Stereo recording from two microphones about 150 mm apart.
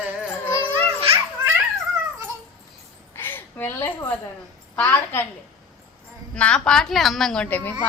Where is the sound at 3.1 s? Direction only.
15° left (ahead or behind).